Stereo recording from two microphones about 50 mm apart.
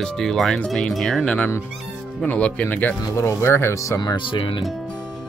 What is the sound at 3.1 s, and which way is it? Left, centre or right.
Speech, left.